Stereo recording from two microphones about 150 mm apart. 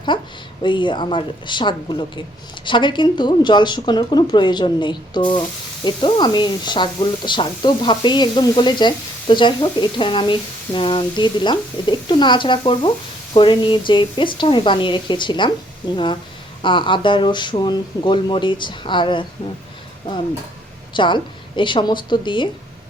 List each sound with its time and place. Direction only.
0.6 s speech: 30° left (ahead or behind)
16.6 s speech: 35° left (ahead or behind)
20.9 s speech: 30° left (ahead or behind)